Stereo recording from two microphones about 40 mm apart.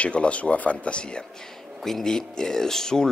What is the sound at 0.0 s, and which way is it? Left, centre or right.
Speech, left.